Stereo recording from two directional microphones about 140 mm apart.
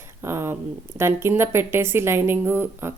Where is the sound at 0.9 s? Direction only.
20° right (ahead or behind).